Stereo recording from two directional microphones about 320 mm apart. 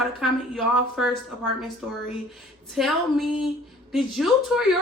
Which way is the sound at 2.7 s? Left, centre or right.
Centre.